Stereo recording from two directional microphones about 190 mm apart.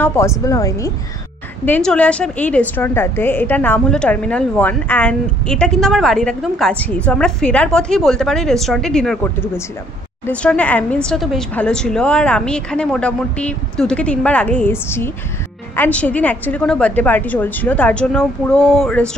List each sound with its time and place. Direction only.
0.0 s a woman's voice: 15° left (ahead or behind)
1.7 s a woman's voice: 5° left (ahead or behind)